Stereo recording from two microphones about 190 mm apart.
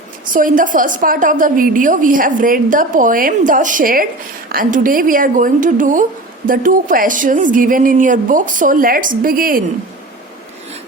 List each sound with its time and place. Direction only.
0.3 s a woman's voice: 45° right (ahead or behind)